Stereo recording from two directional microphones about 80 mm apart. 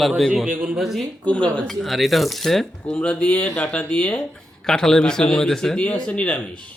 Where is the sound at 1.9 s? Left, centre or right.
Centre.